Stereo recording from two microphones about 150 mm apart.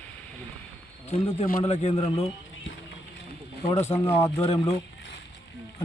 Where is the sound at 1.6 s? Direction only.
45° left (ahead or behind).